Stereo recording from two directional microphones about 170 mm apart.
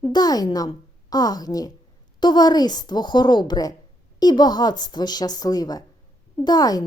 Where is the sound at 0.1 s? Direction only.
25° left (ahead or behind).